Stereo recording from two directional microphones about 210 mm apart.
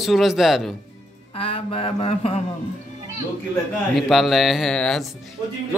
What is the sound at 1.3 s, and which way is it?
Music, 25° left (ahead or behind).